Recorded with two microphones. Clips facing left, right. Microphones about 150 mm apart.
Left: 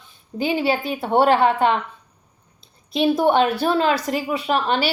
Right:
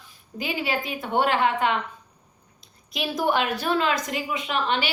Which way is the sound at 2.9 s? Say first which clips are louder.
Left 7 dB; 25° left (ahead or behind).